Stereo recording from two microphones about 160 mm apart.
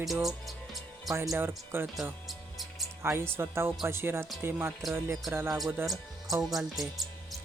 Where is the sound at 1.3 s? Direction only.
15° right (ahead or behind).